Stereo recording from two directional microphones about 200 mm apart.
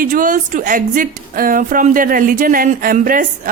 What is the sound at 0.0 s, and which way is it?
A woman's voice, 40° right (ahead or behind).